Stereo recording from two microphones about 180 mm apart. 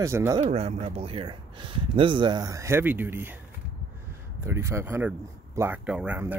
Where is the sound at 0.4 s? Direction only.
35° right (ahead or behind); by 3.3 s 10° right (ahead or behind).